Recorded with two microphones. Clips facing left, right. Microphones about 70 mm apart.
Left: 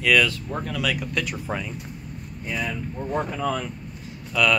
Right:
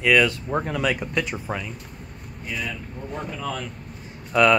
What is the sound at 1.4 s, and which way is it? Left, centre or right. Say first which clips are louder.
Speech: even; centre.